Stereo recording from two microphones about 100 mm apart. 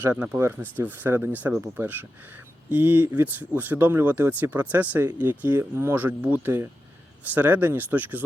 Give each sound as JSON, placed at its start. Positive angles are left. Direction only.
{"t": 0.0, "sound": "speech", "side_deg": -20}